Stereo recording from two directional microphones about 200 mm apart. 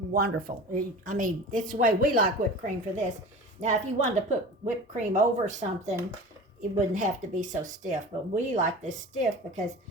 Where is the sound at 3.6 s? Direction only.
35° right (ahead or behind).